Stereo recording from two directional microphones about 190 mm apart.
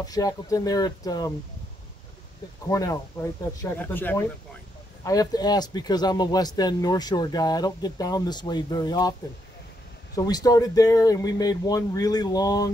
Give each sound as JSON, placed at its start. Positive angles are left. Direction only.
{"t": 0.0, "sound": "speech", "side_deg": 20}
{"t": 2.7, "sound": "speech", "side_deg": 15}
{"t": 10.1, "sound": "speech", "side_deg": 20}